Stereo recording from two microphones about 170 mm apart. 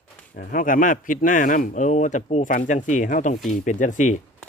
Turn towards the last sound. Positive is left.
turn(degrees=45)  # may be behind; listen again after turning